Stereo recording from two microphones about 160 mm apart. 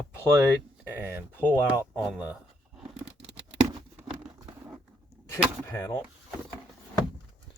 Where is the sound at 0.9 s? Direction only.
15° right (ahead or behind).